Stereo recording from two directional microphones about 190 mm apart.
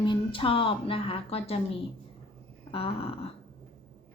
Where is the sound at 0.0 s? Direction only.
25° left (ahead or behind).